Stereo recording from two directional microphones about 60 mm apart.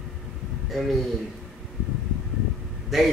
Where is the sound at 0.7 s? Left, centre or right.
Centre.